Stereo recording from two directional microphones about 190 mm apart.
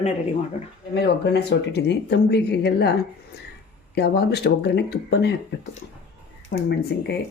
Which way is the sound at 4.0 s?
60° left (ahead or behind).